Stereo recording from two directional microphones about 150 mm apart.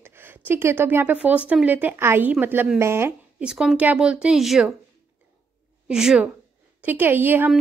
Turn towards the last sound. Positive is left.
turn(degrees=-15)  # may be behind; listen again after turning